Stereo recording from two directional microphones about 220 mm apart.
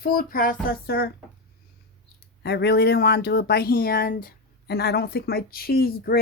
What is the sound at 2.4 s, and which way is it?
Speech, 45° left (ahead or behind).